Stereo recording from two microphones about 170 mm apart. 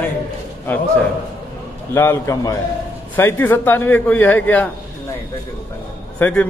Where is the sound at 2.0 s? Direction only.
15° left (ahead or behind).